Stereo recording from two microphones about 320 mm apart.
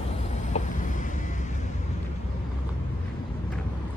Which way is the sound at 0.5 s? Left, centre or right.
Left.